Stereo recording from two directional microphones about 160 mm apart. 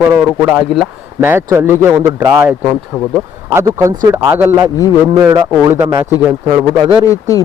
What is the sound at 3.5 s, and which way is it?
A man's voice, 15° right (ahead or behind).